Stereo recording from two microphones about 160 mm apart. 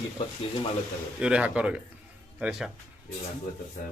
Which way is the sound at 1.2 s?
5° right (ahead or behind).